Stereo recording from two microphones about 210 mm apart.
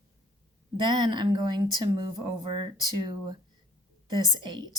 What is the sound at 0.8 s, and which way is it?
A woman's voice, 20° right (ahead or behind).